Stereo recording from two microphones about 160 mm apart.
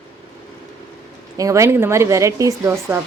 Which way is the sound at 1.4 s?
20° right (ahead or behind).